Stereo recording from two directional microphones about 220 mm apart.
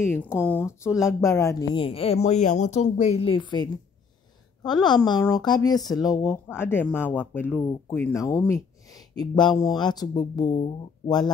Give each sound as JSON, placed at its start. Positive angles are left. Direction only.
{"t": 0.1, "sound": "a woman's voice", "side_deg": 10}
{"t": 4.6, "sound": "a woman's voice", "side_deg": 20}